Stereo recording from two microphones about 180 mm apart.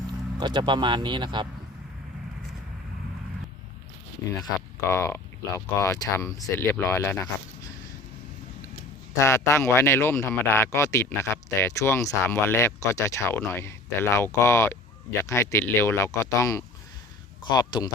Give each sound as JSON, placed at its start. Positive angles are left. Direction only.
{"t": 0.3, "sound": "speech", "side_deg": -25}
{"t": 4.4, "sound": "speech", "side_deg": 20}
{"t": 9.1, "sound": "speech", "side_deg": 15}